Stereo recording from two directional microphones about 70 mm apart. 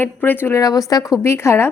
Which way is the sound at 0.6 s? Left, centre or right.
Left.